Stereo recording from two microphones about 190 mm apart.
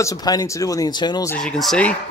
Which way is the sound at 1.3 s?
5° left (ahead or behind).